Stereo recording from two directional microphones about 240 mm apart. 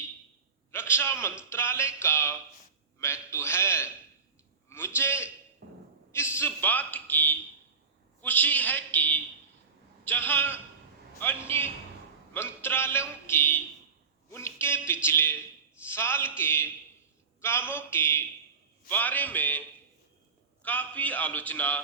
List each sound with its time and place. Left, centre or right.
0.7 s a man's voice: centre
4.9 s a man's voice: centre
5.6 s a sound: right
6.1 s a man's voice: centre